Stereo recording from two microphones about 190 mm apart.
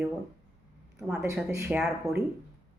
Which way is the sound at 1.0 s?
5° right (ahead or behind).